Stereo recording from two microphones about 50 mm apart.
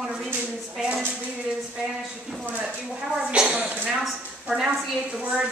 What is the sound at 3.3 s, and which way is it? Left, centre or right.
A woman's voice, centre.